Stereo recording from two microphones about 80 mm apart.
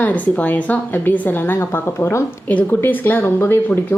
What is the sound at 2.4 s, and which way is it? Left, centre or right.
Speech, left.